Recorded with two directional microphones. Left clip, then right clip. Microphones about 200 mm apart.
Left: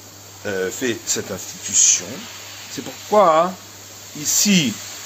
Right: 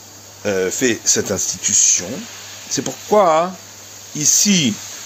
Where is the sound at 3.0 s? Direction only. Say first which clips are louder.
Even; 45° right (ahead or behind).